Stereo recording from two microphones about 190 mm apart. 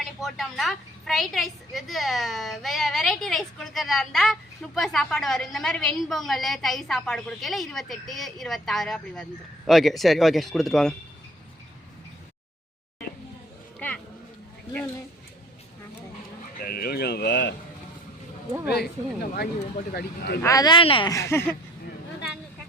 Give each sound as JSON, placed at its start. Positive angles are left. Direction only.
{"t": 0.0, "sound": "a woman's voice", "side_deg": 0}
{"t": 13.7, "sound": "a sound", "side_deg": 5}
{"t": 16.6, "sound": "speech", "side_deg": 50}
{"t": 18.7, "sound": "speech", "side_deg": 55}
{"t": 20.4, "sound": "speech", "side_deg": 20}